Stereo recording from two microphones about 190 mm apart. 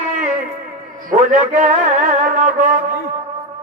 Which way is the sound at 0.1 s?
40° right (ahead or behind).